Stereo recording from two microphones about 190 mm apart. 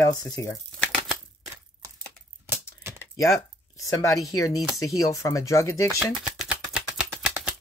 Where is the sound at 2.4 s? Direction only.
10° right (ahead or behind).